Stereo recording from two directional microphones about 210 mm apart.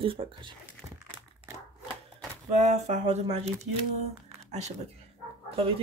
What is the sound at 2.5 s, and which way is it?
Speech, 35° right (ahead or behind).